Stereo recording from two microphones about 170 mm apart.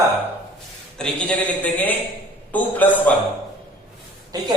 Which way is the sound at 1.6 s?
10° left (ahead or behind).